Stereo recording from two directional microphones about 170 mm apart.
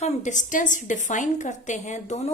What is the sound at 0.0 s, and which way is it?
A woman's voice, 45° left (ahead or behind).